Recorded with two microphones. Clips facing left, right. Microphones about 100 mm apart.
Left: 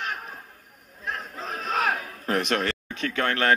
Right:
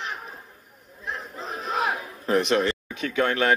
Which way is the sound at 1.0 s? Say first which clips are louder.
Left 1 dB; 60° left (ahead or behind).